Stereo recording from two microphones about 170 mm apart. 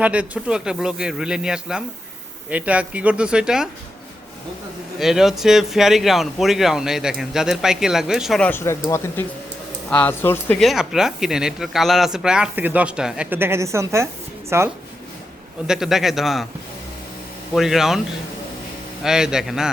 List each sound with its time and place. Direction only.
0.0 s speech: 5° right (ahead or behind)
4.9 s speech: centre (ahead or behind)
10.6 s speech: centre (ahead or behind)
15.6 s speech: 5° right (ahead or behind)
17.5 s speech: centre (ahead or behind)
19.0 s speech: 5° right (ahead or behind)